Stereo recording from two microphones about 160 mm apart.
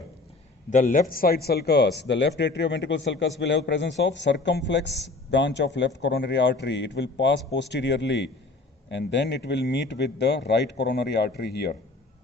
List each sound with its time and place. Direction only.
0.7 s speech: 55° left (ahead or behind); by 11.8 s 85° left